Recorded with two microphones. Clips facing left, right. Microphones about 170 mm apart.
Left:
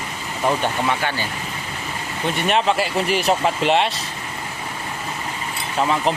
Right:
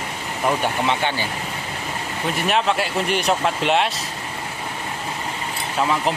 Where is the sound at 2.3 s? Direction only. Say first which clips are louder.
Left 1 dB; centre (ahead or behind).